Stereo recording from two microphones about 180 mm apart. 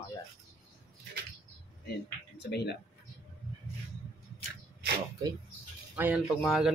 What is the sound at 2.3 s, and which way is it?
Speech, 70° left (ahead or behind).